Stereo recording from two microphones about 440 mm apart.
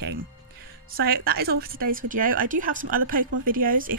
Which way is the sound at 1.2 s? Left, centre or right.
Right.